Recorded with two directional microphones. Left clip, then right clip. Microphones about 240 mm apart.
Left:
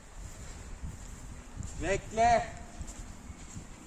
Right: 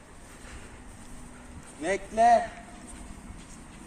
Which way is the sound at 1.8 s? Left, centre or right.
Centre.